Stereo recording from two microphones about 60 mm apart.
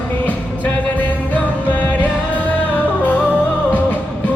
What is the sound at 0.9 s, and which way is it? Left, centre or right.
Music, left.